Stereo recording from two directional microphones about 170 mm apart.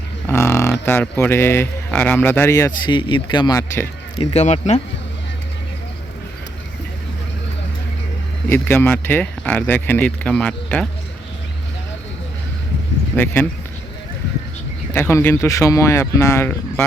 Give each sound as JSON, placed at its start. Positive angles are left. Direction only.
{"t": 0.3, "sound": "speech", "side_deg": 15}
{"t": 4.2, "sound": "speech", "side_deg": 40}
{"t": 8.4, "sound": "speech", "side_deg": 10}
{"t": 13.1, "sound": "speech", "side_deg": 10}
{"t": 14.9, "sound": "speech", "side_deg": 15}